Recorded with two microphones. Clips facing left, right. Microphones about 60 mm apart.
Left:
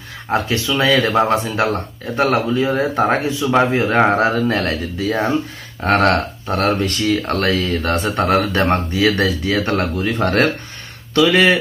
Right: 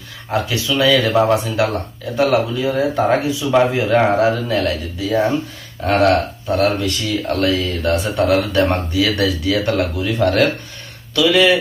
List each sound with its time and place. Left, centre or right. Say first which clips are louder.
0.3 s speech: left 1 dB; left